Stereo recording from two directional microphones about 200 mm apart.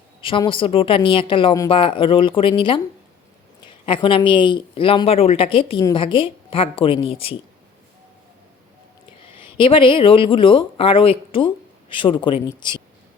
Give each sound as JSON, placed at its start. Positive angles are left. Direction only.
{"t": 0.2, "sound": "speech", "side_deg": 25}
{"t": 9.6, "sound": "speech", "side_deg": 25}